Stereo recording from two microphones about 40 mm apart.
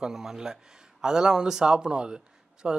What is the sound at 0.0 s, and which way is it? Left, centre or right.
Speech, centre.